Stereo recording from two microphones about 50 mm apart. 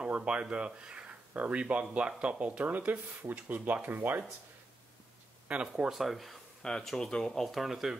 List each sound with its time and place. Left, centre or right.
0.1 s speech: right
2.0 s speech: centre
2.3 s speech: right
5.5 s speech: right
5.9 s speech: centre
6.6 s speech: centre
7.4 s speech: centre